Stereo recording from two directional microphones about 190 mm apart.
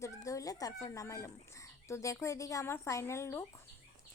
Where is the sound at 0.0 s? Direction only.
15° left (ahead or behind).